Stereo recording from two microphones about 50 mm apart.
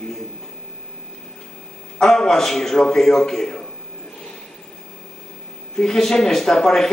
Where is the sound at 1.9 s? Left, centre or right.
Centre.